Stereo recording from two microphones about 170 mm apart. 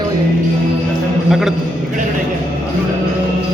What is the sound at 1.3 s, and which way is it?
Speech, centre (ahead or behind).